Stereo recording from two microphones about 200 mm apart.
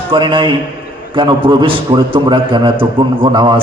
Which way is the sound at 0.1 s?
25° right (ahead or behind).